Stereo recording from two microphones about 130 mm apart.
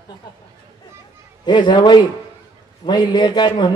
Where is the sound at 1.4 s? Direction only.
35° left (ahead or behind).